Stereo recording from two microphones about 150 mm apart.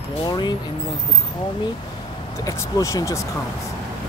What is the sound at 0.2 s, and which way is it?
Speech, 30° left (ahead or behind).